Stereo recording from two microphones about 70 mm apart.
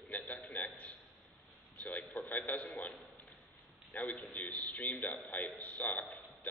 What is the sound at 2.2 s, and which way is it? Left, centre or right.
Radio, left.